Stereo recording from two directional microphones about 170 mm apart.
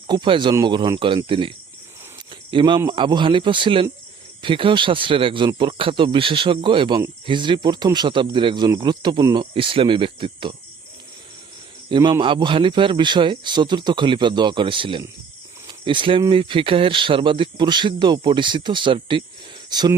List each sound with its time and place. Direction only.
0.1 s speech: 30° right (ahead or behind)
11.9 s speech: 25° right (ahead or behind)